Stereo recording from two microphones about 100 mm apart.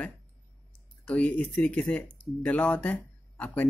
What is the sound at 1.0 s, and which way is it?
Speech, 10° left (ahead or behind).